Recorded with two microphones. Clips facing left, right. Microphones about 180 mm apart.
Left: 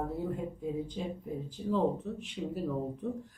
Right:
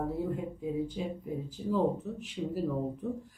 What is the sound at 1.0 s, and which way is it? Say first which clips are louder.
Speech: right 1 dB; 5° right (ahead or behind).